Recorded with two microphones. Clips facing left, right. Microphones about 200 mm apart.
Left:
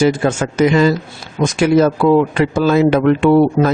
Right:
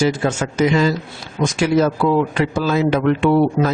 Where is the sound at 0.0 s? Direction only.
55° left (ahead or behind).